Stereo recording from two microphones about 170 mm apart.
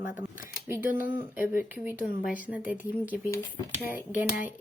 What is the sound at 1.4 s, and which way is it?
Speech, 10° right (ahead or behind).